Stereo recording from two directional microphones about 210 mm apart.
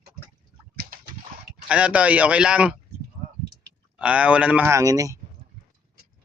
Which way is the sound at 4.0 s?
5° right (ahead or behind).